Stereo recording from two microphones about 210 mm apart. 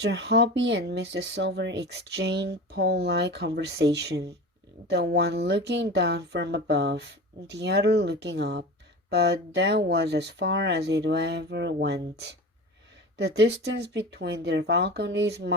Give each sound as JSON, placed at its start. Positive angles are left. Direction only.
{"t": 0.0, "sound": "speech", "side_deg": -55}